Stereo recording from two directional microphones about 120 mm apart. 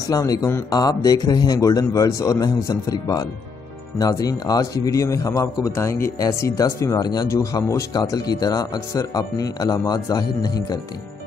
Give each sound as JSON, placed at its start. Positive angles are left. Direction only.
{"t": 0.0, "sound": "a man's voice", "side_deg": 30}